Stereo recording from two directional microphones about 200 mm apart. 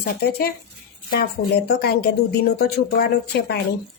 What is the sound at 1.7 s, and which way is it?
Speech, 55° left (ahead or behind).